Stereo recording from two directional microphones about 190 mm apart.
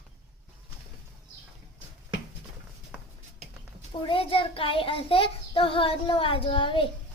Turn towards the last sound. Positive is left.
turn(degrees=25)  # may be behind; listen again after turning